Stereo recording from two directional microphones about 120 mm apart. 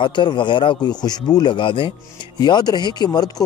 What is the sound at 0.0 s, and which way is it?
Speech, 40° left (ahead or behind).